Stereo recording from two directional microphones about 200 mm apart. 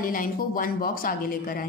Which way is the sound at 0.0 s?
45° left (ahead or behind).